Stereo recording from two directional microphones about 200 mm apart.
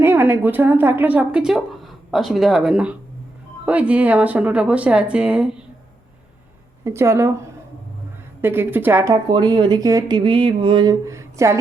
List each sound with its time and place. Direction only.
0.0 s speech: 10° right (ahead or behind)
6.8 s speech: 15° right (ahead or behind)
8.4 s speech: 10° right (ahead or behind)